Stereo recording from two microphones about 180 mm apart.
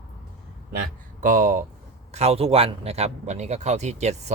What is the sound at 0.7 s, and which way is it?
A man's voice, 50° right (ahead or behind).